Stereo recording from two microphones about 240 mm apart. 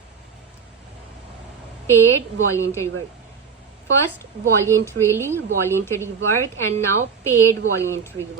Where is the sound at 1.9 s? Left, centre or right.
Centre.